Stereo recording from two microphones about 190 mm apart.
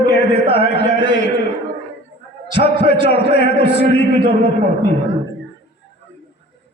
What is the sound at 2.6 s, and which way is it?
A man's voice, 60° left (ahead or behind).